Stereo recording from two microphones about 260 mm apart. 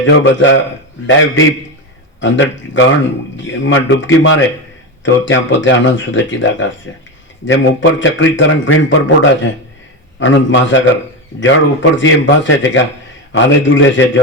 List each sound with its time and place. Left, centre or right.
0.0 s speech: left